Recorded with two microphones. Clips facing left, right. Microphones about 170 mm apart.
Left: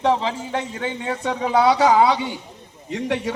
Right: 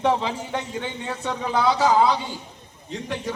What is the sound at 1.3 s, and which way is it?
A man's voice, 70° left (ahead or behind).